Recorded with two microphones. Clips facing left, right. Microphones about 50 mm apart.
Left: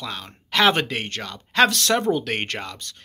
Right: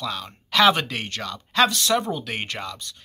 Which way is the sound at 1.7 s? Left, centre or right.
Left.